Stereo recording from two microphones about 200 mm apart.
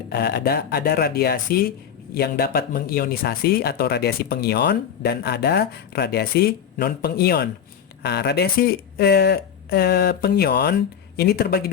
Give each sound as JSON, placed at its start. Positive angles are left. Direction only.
{"t": 0.1, "sound": "speech", "side_deg": 55}